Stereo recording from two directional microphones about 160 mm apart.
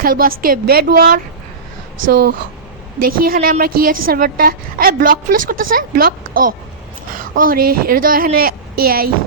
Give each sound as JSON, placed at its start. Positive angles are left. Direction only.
{"t": 0.0, "sound": "a woman's voice", "side_deg": -65}
{"t": 3.0, "sound": "a woman's voice", "side_deg": -65}